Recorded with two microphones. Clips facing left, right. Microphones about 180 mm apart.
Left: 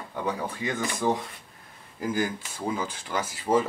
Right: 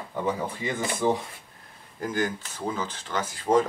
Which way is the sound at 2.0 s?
10° left (ahead or behind).